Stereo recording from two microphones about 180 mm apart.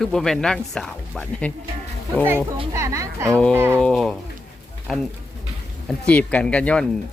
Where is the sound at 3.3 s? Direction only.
5° left (ahead or behind).